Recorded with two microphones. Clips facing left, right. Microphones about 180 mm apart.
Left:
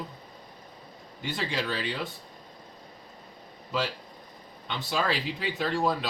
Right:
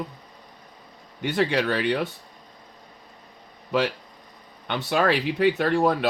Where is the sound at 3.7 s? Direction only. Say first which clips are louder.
Right 7 dB; 65° right (ahead or behind).